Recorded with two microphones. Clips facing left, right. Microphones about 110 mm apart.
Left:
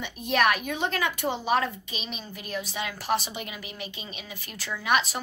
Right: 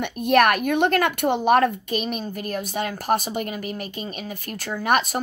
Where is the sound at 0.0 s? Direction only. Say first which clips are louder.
Right 7 dB; 55° right (ahead or behind).